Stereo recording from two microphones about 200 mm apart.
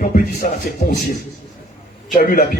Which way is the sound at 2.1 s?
45° left (ahead or behind).